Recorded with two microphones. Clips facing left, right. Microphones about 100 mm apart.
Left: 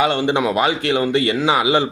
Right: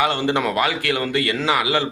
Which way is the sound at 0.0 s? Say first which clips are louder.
Left 3 dB; 20° left (ahead or behind).